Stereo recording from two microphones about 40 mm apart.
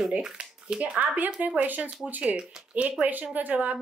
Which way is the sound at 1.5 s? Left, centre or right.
Right.